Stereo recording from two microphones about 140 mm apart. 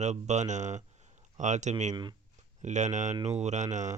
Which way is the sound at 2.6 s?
60° right (ahead or behind).